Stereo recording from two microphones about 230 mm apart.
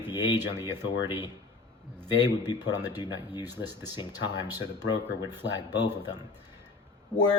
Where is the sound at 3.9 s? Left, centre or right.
Centre.